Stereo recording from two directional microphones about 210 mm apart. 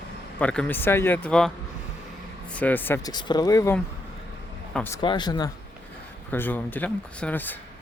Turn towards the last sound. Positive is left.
turn(degrees=10)  # may be behind; listen again after turning